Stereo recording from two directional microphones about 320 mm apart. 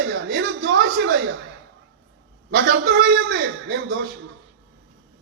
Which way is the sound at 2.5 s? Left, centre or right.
Right.